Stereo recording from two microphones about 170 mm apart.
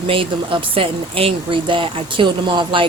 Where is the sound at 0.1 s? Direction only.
30° right (ahead or behind).